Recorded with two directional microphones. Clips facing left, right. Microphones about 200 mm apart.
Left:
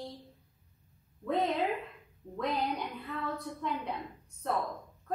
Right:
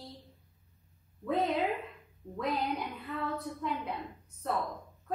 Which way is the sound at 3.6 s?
5° right (ahead or behind).